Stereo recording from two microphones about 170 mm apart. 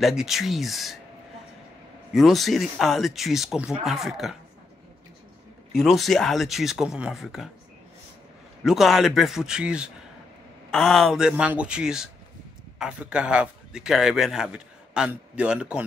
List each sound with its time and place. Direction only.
0.0 s speech: centre (ahead or behind)
2.1 s speech: centre (ahead or behind)
5.8 s speech: centre (ahead or behind)
8.6 s a man's voice: centre (ahead or behind)